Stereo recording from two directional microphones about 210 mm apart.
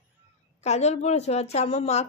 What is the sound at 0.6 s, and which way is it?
A woman's voice, 30° left (ahead or behind).